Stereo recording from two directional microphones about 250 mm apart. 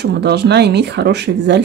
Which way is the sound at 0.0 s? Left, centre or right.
Right.